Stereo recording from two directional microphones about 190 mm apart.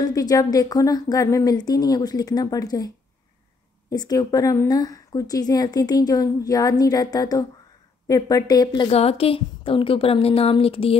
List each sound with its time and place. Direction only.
0.0 s speech: 20° left (ahead or behind)
3.9 s speech: 20° left (ahead or behind)